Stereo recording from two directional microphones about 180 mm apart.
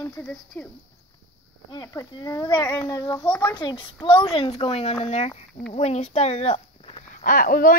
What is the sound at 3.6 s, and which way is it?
A child's voice, 25° left (ahead or behind).